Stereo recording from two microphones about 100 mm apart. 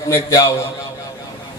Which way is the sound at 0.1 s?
30° left (ahead or behind).